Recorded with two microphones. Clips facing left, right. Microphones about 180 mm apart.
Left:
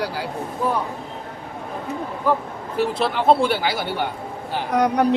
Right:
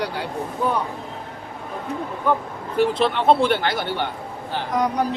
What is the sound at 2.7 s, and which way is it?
Speech, 5° left (ahead or behind).